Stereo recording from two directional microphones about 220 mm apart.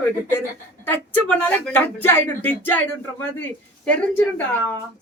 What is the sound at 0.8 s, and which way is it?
Speech, 5° left (ahead or behind).